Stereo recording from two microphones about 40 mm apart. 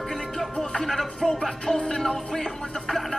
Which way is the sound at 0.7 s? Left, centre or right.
Centre.